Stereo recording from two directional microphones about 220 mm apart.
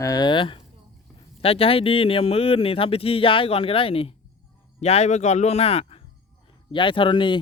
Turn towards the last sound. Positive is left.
turn(degrees=20)  # may be behind; listen again after turning